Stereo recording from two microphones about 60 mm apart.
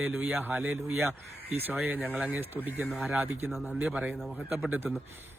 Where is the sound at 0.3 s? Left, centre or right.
Right.